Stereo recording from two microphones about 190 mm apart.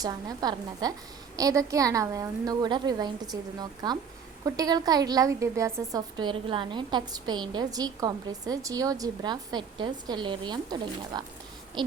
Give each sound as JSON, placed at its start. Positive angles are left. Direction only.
{"t": 0.0, "sound": "a woman's voice", "side_deg": -20}